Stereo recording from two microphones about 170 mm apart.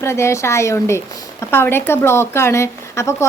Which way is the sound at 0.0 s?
15° left (ahead or behind).